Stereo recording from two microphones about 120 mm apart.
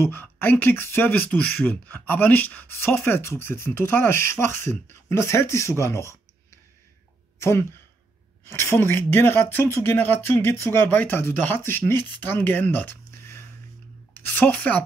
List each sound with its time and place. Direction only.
0.0 s speech: 15° left (ahead or behind)
7.3 s a woman's voice: 20° left (ahead or behind)